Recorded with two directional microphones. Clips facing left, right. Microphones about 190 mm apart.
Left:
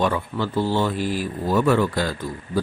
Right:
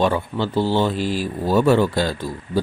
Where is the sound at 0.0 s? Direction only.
30° right (ahead or behind).